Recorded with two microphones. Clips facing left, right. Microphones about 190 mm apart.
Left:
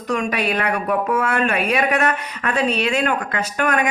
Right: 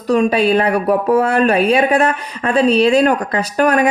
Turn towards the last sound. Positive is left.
turn(degrees=-35)  # may be behind; listen again after turning